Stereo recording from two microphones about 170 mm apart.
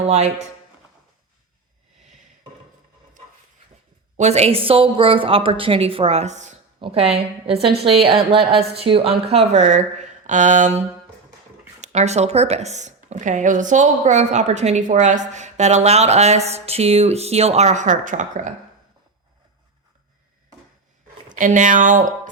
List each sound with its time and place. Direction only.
0.1 s speech: 40° right (ahead or behind)
4.2 s speech: 40° right (ahead or behind)
6.7 s speech: 35° right (ahead or behind)
21.2 s speech: 50° right (ahead or behind)